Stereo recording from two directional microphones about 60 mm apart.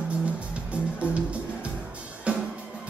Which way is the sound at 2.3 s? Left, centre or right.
Right.